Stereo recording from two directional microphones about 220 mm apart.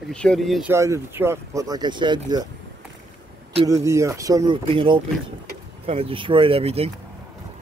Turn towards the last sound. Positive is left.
turn(degrees=-25)  # may be behind; listen again after turning